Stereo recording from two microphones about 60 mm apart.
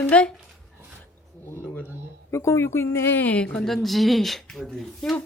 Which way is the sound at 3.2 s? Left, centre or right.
Left.